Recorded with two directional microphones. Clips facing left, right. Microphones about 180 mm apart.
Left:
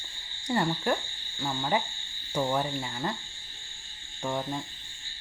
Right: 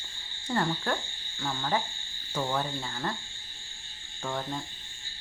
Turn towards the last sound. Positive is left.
turn(degrees=15)  # may be behind; listen again after turning